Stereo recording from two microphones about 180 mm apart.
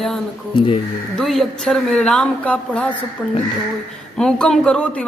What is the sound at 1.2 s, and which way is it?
A man's voice, centre (ahead or behind).